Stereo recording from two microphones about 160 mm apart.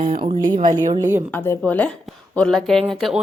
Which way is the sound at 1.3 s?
10° left (ahead or behind).